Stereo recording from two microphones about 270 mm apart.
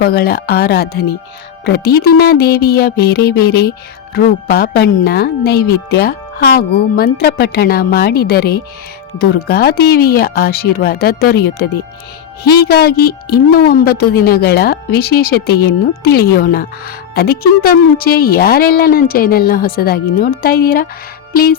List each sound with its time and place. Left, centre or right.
0.0 s speech: left